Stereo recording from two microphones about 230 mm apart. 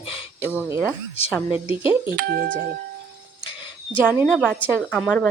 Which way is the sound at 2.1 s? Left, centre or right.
Right.